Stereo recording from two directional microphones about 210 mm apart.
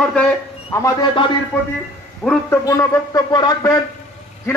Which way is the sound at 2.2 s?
5° left (ahead or behind).